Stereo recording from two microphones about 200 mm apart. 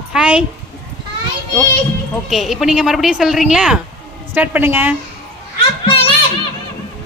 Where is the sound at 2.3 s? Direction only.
Centre (ahead or behind).